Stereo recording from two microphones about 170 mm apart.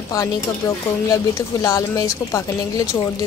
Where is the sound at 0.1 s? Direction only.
20° left (ahead or behind).